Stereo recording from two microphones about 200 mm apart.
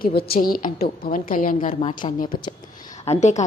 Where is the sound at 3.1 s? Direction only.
35° left (ahead or behind).